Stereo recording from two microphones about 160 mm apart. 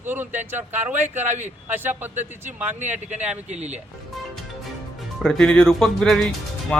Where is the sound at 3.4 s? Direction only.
45° right (ahead or behind).